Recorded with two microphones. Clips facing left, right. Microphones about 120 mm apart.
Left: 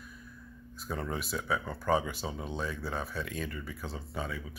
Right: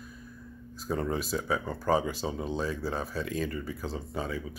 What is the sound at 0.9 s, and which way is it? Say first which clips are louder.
Speech: right 5 dB; 35° right (ahead or behind).